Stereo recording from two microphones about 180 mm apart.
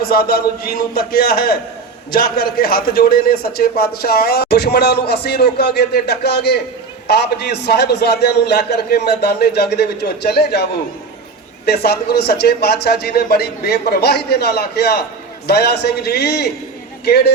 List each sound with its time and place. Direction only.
0.0 s a man's voice: 55° left (ahead or behind)